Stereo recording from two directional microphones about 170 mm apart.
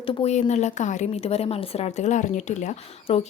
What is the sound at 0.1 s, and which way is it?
A woman's voice, 35° left (ahead or behind).